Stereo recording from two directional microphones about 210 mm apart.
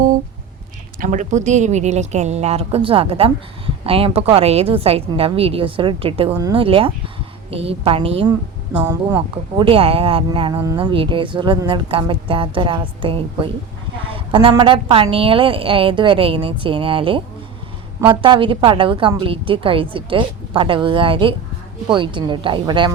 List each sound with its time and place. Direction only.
0.9 s speech: 35° right (ahead or behind)
8.7 s speech: 5° right (ahead or behind)
9.1 s speech: 20° right (ahead or behind)